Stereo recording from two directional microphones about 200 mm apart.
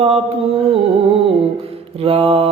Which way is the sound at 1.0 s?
30° right (ahead or behind).